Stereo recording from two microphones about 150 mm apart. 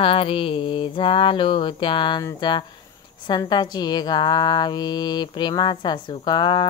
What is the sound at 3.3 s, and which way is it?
A woman's voice, 30° left (ahead or behind).